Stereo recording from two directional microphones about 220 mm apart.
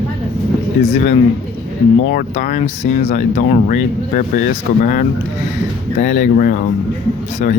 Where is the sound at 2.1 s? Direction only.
35° left (ahead or behind).